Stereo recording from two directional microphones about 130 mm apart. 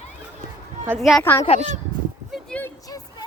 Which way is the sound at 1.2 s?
20° left (ahead or behind).